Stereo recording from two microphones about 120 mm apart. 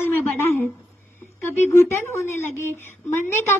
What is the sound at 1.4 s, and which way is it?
A woman's voice, 15° left (ahead or behind).